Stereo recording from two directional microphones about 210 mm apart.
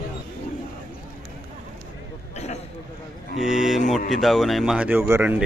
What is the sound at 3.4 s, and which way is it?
Cattle, centre (ahead or behind).